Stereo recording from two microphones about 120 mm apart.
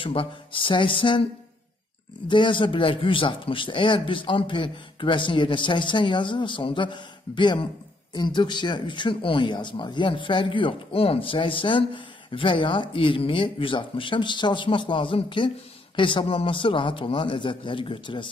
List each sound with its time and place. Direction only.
0.0 s speech: 45° left (ahead or behind)
2.2 s speech: 40° left (ahead or behind)